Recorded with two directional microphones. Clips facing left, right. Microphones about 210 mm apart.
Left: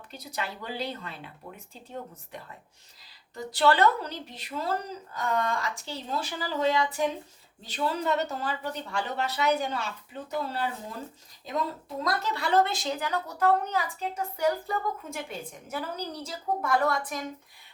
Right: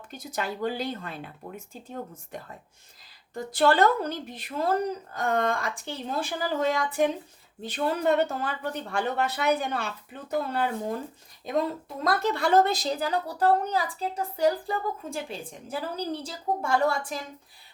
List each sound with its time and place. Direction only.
0.1 s speech: 50° right (ahead or behind)
12.0 s a woman's voice: 50° right (ahead or behind); by 17.2 s 30° right (ahead or behind)